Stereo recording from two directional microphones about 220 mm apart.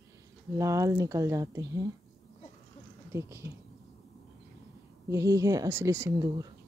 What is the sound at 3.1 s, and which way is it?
Speech, 10° right (ahead or behind).